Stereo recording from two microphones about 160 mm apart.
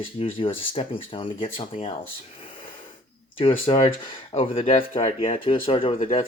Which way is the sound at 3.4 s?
35° left (ahead or behind).